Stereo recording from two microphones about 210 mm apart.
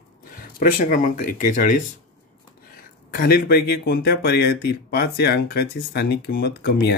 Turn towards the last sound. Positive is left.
turn(degrees=50)  # may be behind; listen again after turning